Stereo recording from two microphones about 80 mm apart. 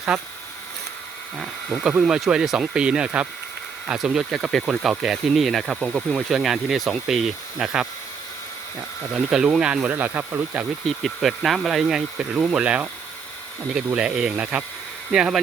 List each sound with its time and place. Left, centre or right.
0.1 s speech: centre
1.4 s speech: centre
9.1 s speech: centre
10.8 s speech: centre